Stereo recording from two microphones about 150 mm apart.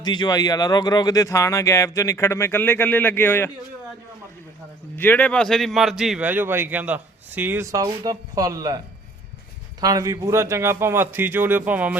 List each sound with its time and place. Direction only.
0.0 s speech: 30° left (ahead or behind)
4.9 s a man's voice: 10° left (ahead or behind); by 8.8 s 25° right (ahead or behind)
9.8 s a man's voice: 25° right (ahead or behind)